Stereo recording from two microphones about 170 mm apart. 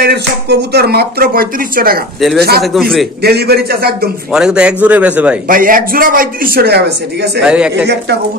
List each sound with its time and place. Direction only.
0.0 s speech: 75° right (ahead or behind); by 2.0 s 60° right (ahead or behind)
2.6 s speech: centre (ahead or behind)
3.2 s speech: 70° right (ahead or behind)
4.3 s a man's voice: 5° right (ahead or behind)
5.5 s a man's voice: 55° right (ahead or behind); by 7.4 s 75° right (ahead or behind)
7.4 s speech: 5° right (ahead or behind)
7.8 s speech: 80° right